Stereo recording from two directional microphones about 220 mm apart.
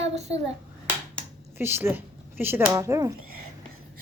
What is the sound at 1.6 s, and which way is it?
A woman's voice, 10° right (ahead or behind).